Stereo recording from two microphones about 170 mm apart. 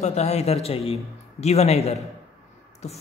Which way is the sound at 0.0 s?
40° left (ahead or behind).